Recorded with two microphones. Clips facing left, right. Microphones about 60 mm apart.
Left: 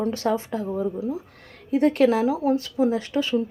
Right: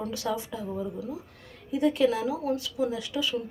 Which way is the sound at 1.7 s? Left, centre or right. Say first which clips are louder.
Left 5 dB; left.